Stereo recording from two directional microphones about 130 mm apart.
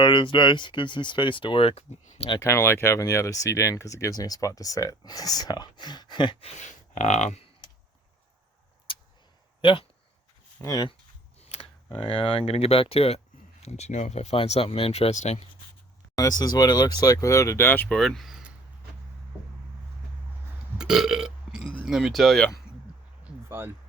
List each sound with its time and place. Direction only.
0.0 s speech: 40° left (ahead or behind)
2.4 s speech: 20° left (ahead or behind); by 6.3 s 35° left (ahead or behind)
6.4 s speech: 60° left (ahead or behind)
8.9 s a sound: 40° left (ahead or behind)
9.6 s speech: 40° left (ahead or behind)
10.6 s speech: 30° left (ahead or behind)
11.3 s speech: 55° left (ahead or behind)
16.1 s speech: 30° left (ahead or behind)
17.9 s speech: centre (ahead or behind)
20.7 s burping: 5° right (ahead or behind)
23.2 s a sound: 15° right (ahead or behind)